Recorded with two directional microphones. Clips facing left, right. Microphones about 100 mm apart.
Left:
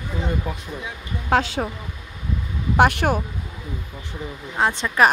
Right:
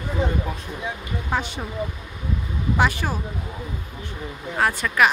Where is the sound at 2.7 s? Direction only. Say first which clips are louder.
Left 6 dB; 60° left (ahead or behind).